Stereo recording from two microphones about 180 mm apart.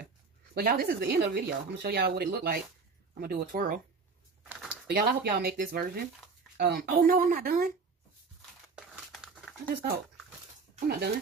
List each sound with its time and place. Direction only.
0.6 s speech: 60° right (ahead or behind)
4.4 s a sound: 10° right (ahead or behind)
4.8 s speech: 60° right (ahead or behind)
8.7 s crumpling: 5° right (ahead or behind)
9.7 s speech: 55° right (ahead or behind)